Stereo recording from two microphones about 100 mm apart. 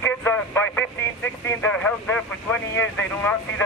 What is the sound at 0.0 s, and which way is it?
Speech, 20° left (ahead or behind).